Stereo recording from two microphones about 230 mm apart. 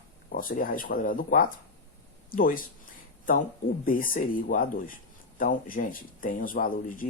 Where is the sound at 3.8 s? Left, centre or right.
Left.